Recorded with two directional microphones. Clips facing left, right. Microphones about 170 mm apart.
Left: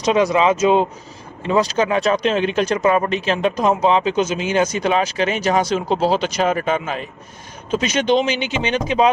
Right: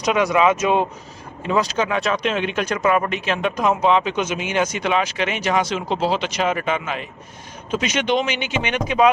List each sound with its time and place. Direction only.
0.0 s speech: 30° left (ahead or behind)